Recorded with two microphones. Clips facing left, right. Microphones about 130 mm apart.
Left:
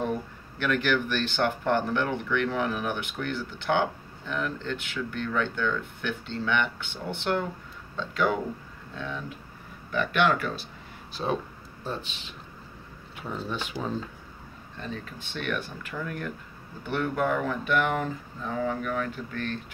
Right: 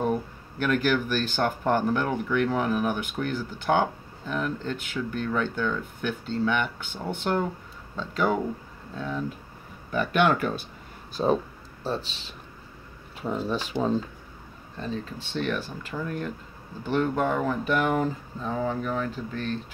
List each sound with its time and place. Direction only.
0.6 s speech: 40° right (ahead or behind)
11.2 s speech: 30° right (ahead or behind)
13.5 s speech: 40° right (ahead or behind)
14.8 s speech: 30° right (ahead or behind)